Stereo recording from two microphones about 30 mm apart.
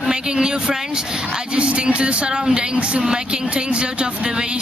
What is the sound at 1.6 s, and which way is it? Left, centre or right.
Speech, right.